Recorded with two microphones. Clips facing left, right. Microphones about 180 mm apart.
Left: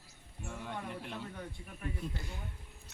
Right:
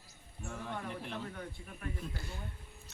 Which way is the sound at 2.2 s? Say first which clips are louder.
Even; 15° left (ahead or behind).